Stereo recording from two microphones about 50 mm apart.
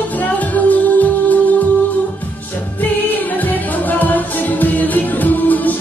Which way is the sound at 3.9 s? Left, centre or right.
Left.